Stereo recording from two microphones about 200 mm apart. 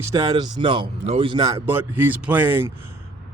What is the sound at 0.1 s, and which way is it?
Speech, 20° right (ahead or behind).